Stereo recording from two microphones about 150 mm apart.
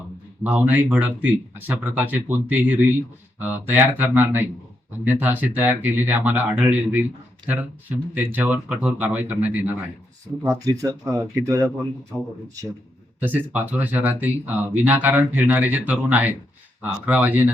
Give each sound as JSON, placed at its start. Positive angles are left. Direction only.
{"t": 0.4, "sound": "speech", "side_deg": -10}
{"t": 10.4, "sound": "speech", "side_deg": -20}
{"t": 13.1, "sound": "speech", "side_deg": -10}